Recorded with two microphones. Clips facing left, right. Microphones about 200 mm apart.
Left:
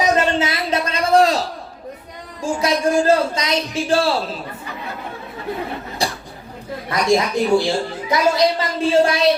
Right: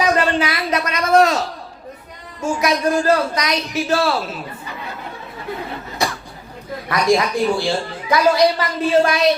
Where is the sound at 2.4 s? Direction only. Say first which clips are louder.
Even; 30° left (ahead or behind).